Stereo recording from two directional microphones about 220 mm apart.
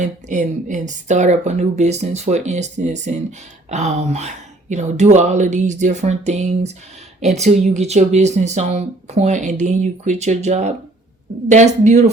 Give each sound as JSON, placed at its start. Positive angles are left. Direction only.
{"t": 0.0, "sound": "speech", "side_deg": -35}